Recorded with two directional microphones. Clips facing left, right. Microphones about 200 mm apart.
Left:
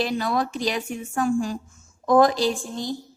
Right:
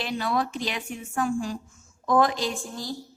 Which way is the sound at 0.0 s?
40° left (ahead or behind).